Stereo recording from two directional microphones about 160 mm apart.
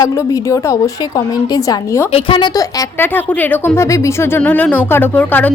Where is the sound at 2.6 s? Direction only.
20° left (ahead or behind).